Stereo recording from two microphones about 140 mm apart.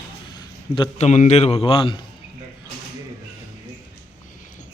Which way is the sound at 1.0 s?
55° left (ahead or behind).